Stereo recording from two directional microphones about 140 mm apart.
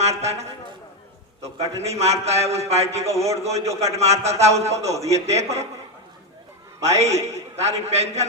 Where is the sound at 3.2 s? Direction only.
20° right (ahead or behind).